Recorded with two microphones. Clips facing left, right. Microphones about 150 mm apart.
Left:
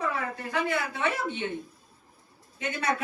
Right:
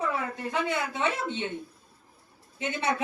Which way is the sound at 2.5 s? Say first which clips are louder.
Right 1 dB; 25° right (ahead or behind).